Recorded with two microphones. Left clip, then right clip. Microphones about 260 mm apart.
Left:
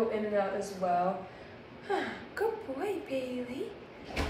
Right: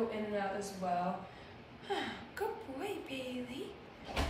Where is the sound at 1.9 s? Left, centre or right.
Centre.